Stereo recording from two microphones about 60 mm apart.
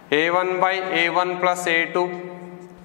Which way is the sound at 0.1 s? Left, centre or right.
Centre.